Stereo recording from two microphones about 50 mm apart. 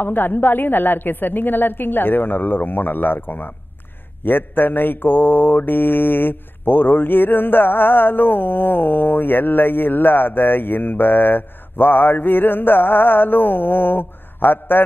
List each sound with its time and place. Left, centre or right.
0.0 s mantra: left